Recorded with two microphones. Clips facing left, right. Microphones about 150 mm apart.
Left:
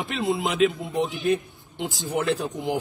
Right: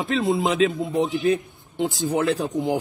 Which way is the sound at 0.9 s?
Centre (ahead or behind).